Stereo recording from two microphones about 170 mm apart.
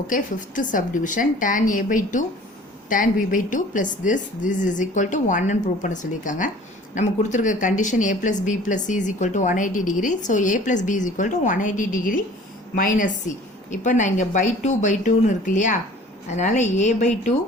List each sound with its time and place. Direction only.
0.1 s speech: 50° left (ahead or behind)